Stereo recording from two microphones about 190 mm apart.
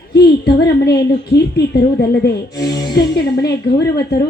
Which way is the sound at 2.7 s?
20° left (ahead or behind).